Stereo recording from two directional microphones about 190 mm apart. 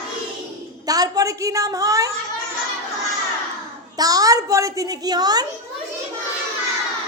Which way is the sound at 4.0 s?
20° right (ahead or behind).